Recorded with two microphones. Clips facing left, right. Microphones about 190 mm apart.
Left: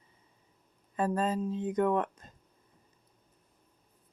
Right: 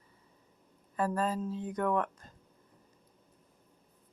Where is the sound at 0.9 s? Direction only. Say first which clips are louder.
Left 2 dB; 20° left (ahead or behind).